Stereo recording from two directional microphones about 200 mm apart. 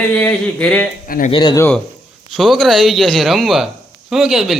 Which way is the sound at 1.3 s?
20° left (ahead or behind).